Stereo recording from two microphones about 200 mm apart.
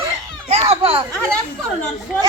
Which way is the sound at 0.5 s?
30° right (ahead or behind).